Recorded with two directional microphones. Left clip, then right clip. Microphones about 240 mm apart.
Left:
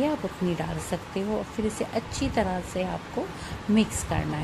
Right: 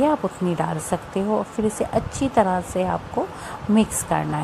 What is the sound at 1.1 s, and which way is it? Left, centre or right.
Speech, centre.